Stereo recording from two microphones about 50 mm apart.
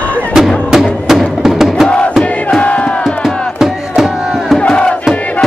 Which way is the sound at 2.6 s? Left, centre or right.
Left.